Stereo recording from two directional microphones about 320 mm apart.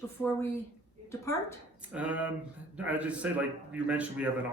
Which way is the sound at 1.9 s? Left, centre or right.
Centre.